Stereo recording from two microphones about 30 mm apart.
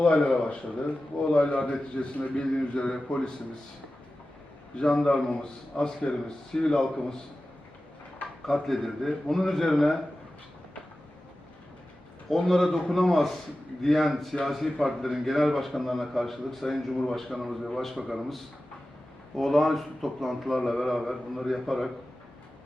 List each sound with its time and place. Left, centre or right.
0.0 s a man's voice: left
1.2 s a man's voice: left
4.7 s a man's voice: left
8.6 s a man's voice: centre
12.3 s a man's voice: centre
17.9 s a man's voice: centre
19.4 s a man's voice: centre